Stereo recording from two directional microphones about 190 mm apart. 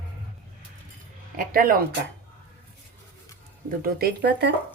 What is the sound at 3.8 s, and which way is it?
Speech, 50° right (ahead or behind).